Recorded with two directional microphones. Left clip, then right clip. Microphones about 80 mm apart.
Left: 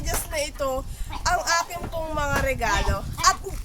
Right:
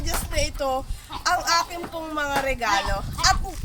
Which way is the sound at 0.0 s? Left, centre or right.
Left.